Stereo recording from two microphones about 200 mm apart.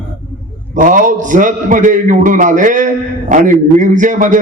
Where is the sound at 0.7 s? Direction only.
40° right (ahead or behind).